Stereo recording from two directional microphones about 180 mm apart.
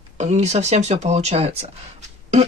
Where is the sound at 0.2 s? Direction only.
40° right (ahead or behind).